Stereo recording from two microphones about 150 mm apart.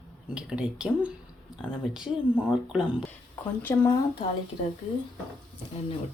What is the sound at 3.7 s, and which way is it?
Speech, 15° left (ahead or behind).